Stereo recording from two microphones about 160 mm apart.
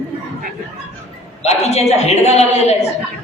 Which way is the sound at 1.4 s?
45° left (ahead or behind).